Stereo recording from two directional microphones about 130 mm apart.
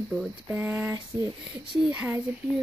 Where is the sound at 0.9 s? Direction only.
35° right (ahead or behind).